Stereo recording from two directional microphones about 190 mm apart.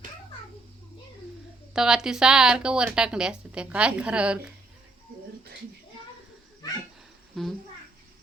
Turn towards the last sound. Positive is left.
turn(degrees=0)  # may be behind; listen again after turning